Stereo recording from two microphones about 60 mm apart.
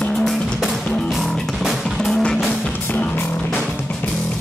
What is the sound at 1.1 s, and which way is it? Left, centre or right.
Music, centre.